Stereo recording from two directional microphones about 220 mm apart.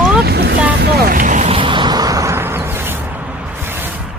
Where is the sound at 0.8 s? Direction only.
45° right (ahead or behind); by 4.0 s 10° right (ahead or behind).